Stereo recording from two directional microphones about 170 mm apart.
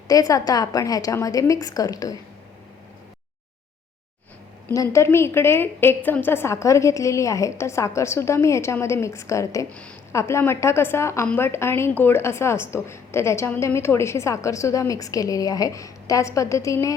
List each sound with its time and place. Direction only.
0.1 s a woman's voice: 20° left (ahead or behind)
4.7 s a woman's voice: 20° left (ahead or behind)